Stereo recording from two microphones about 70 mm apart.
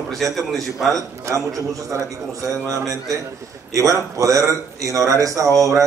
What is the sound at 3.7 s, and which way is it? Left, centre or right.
A man's voice, right.